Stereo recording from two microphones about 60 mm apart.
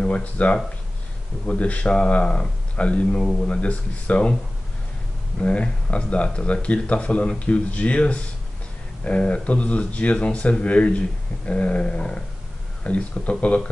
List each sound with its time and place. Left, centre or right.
0.0 s speech: left
5.4 s speech: centre